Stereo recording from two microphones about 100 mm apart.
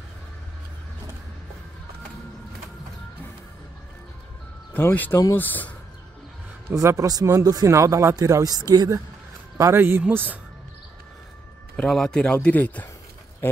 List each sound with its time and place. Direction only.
4.7 s speech: 20° left (ahead or behind)
6.7 s speech: 30° right (ahead or behind)
9.6 s speech: 25° right (ahead or behind)
11.7 s speech: 5° left (ahead or behind)